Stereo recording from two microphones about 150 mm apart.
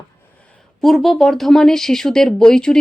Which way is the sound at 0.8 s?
Centre (ahead or behind).